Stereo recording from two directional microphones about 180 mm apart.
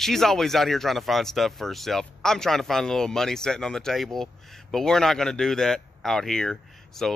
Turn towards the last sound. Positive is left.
turn(degrees=5)  # may be behind; listen again after turning